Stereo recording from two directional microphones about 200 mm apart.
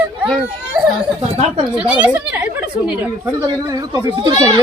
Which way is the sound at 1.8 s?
5° right (ahead or behind).